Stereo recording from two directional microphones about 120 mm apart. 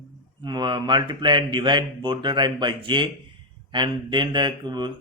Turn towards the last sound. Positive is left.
turn(degrees=-40)  # may be behind; listen again after turning